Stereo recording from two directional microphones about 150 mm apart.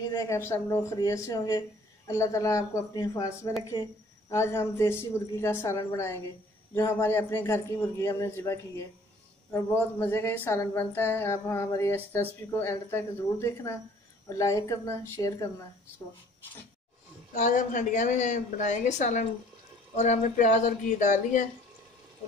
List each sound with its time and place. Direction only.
0.1 s speech: 20° left (ahead or behind)
17.4 s speech: 55° left (ahead or behind)